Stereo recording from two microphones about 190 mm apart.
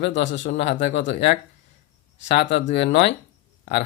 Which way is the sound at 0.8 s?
40° left (ahead or behind).